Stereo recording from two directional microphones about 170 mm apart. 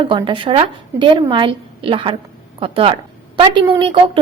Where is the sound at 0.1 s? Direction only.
30° right (ahead or behind).